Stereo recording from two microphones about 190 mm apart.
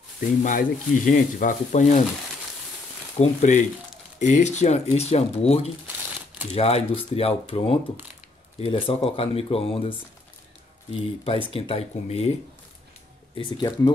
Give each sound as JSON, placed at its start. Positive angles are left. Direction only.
{"t": 0.4, "sound": "speech", "side_deg": 45}
{"t": 3.2, "sound": "speech", "side_deg": 40}